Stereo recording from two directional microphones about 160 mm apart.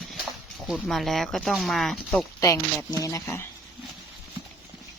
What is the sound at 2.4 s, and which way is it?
Speech, 20° left (ahead or behind).